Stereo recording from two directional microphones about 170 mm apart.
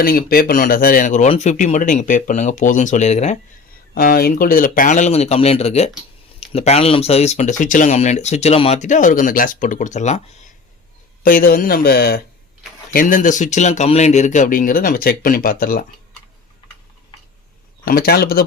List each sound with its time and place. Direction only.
0.0 s speech: 60° left (ahead or behind); by 3.3 s 40° left (ahead or behind)
3.9 s speech: 60° left (ahead or behind); by 10.2 s 45° left (ahead or behind)
11.2 s speech: 55° left (ahead or behind)
12.9 s speech: 55° left (ahead or behind)
17.8 s speech: 65° left (ahead or behind)